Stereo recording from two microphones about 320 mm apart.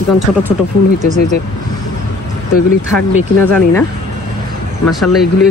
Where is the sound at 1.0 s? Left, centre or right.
Right.